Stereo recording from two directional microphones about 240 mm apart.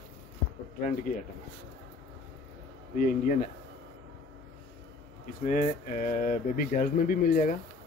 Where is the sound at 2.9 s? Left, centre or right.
Left.